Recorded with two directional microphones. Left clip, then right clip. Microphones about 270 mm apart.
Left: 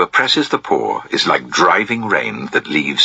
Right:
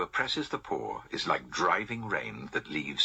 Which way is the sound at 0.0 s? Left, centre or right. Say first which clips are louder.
Left 17 dB; left.